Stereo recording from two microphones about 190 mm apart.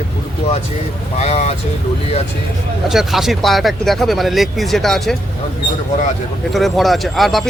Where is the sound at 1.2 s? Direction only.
35° left (ahead or behind).